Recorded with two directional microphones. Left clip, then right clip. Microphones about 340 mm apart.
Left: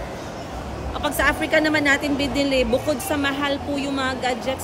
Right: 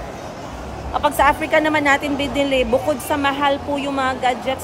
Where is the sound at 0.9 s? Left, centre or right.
Centre.